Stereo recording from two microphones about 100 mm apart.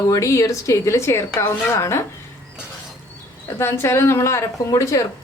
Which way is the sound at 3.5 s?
25° left (ahead or behind).